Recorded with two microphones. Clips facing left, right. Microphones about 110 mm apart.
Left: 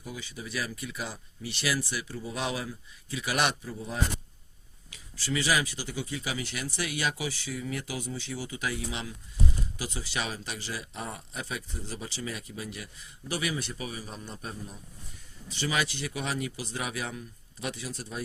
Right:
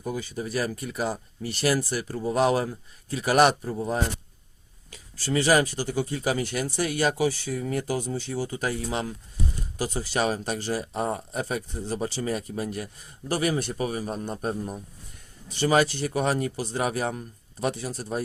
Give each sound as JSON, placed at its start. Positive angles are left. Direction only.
{"t": 0.0, "sound": "speech", "side_deg": -45}